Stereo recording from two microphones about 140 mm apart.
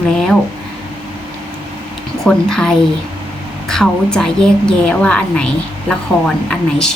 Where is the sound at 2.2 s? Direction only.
5° left (ahead or behind).